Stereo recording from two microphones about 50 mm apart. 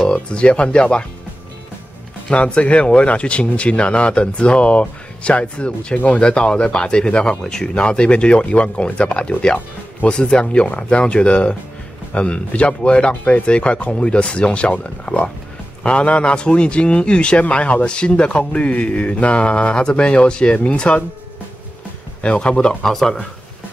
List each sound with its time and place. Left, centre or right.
0.1 s a man's voice: left
2.3 s a man's voice: left
5.9 s speech: left
6.2 s a man's voice: left
13.1 s speech: left
13.5 s a man's voice: left
22.2 s a man's voice: centre
22.8 s speech: centre